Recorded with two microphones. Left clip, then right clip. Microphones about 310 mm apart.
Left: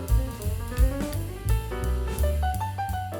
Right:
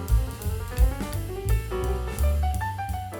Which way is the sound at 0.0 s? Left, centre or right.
Centre.